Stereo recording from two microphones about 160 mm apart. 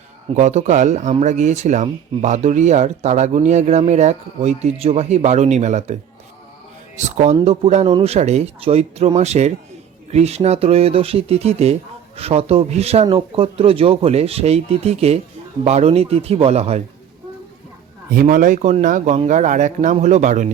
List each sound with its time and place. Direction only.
0.3 s speech: 50° right (ahead or behind)
18.1 s speech: 65° right (ahead or behind)